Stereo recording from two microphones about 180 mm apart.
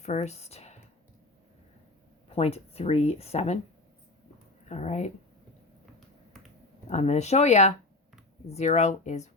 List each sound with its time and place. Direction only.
0.0 s speech: 40° left (ahead or behind)
2.3 s speech: 35° left (ahead or behind)
4.7 s speech: 40° left (ahead or behind)
6.8 s speech: 40° left (ahead or behind)